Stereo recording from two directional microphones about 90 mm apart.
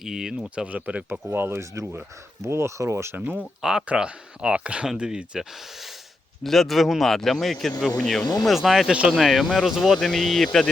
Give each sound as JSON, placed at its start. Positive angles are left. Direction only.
{"t": 0.0, "sound": "speech", "side_deg": -5}
{"t": 1.3, "sound": "speech", "side_deg": -25}
{"t": 3.6, "sound": "speech", "side_deg": -10}
{"t": 8.2, "sound": "speech", "side_deg": 50}
{"t": 8.4, "sound": "speech", "side_deg": 0}